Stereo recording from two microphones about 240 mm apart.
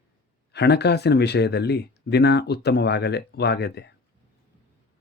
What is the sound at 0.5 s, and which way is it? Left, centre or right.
Speech, left.